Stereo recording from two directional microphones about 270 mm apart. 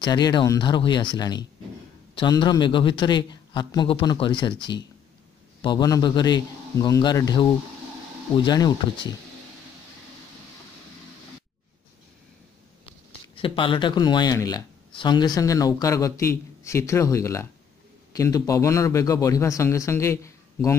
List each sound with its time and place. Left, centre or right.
0.0 s speech: centre
13.4 s speech: centre